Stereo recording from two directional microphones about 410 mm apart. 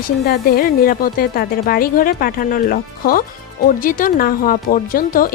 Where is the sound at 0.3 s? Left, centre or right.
Left.